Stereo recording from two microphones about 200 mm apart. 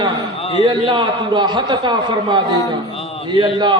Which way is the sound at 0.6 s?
25° right (ahead or behind).